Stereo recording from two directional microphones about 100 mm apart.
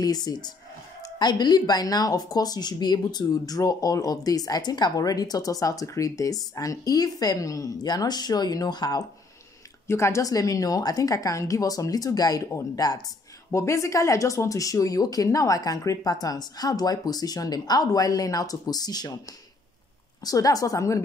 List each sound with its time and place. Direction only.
0.0 s speech: 40° left (ahead or behind)
9.8 s speech: 25° left (ahead or behind)
20.2 s speech: 35° left (ahead or behind)